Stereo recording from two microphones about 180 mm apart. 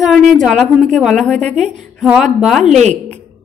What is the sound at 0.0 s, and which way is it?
A woman's voice, centre (ahead or behind).